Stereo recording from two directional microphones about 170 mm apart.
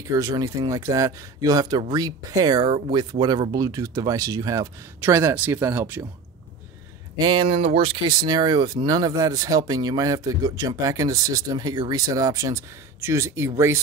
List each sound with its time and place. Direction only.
0.0 s speech: 20° right (ahead or behind)
7.2 s speech: 25° right (ahead or behind)